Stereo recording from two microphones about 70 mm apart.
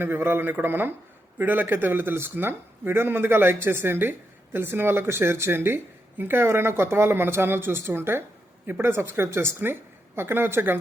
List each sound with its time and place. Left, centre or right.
0.0 s speech: right